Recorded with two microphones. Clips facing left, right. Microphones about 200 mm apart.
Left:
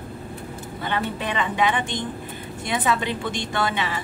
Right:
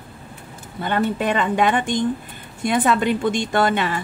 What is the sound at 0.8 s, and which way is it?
A woman's voice, 50° right (ahead or behind).